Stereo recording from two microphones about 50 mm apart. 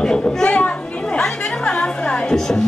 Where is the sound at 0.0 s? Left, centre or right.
Centre.